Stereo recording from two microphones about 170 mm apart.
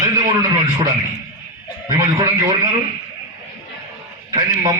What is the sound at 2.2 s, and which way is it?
Speech, 25° right (ahead or behind).